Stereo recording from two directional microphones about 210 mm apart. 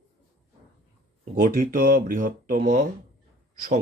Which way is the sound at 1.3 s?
40° right (ahead or behind).